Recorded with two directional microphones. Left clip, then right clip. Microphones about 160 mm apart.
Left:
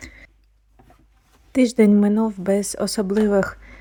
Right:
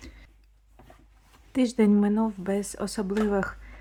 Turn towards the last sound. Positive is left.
turn(degrees=40)  # may be behind; listen again after turning